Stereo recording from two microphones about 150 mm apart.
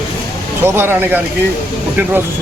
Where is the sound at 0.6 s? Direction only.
15° right (ahead or behind).